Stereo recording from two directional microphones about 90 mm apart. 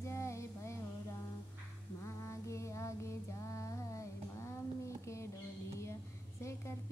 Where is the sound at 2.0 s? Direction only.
30° left (ahead or behind).